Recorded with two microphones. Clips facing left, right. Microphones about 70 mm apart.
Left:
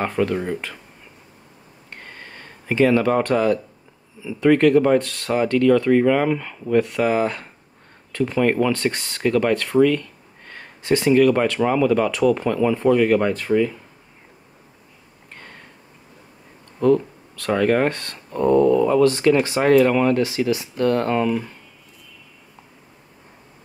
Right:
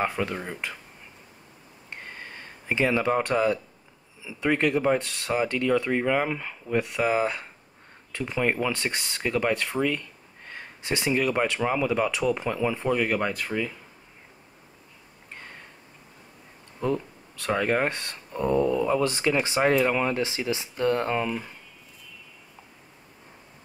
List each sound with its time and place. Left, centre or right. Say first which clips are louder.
0.0 s speech: left 6 dB; centre
2.0 s a sound: left 2 dB; centre
4.2 s speech: left 9 dB; centre
16.8 s a sound: left 10 dB; centre
17.5 s speech: left 6 dB; centre
18.3 s speech: left 8 dB; centre
20.2 s speech: left 7 dB; right; by 21.5 s centre